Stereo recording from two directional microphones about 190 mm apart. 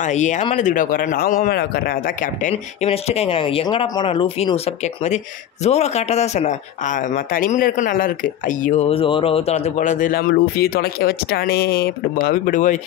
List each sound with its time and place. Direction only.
0.0 s speech: 40° left (ahead or behind)
2.5 s speech: 30° left (ahead or behind)
10.3 s speech: 55° left (ahead or behind)